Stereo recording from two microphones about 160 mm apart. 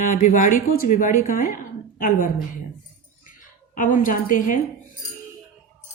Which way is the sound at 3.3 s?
55° left (ahead or behind).